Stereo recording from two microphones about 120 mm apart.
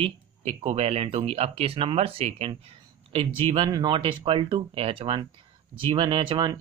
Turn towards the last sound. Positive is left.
turn(degrees=-45)  # may be behind; listen again after turning